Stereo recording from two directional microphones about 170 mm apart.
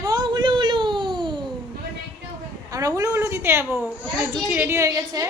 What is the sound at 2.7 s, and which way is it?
Speech, 20° right (ahead or behind).